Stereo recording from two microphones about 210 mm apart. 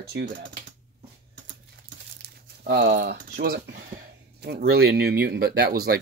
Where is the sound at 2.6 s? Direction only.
50° right (ahead or behind).